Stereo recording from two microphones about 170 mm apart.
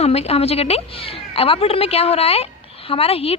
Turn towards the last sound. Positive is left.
turn(degrees=35)  # may be behind; listen again after turning